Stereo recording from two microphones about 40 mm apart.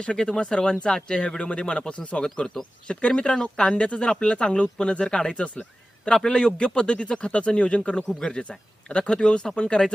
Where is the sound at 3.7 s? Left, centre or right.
Left.